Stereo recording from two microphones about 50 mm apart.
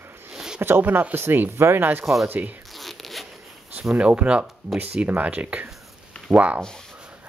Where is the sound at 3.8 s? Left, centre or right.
Right.